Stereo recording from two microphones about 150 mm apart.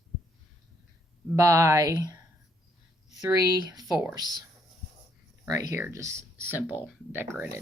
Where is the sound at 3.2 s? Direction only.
25° right (ahead or behind).